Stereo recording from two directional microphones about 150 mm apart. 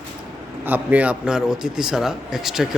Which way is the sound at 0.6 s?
10° right (ahead or behind).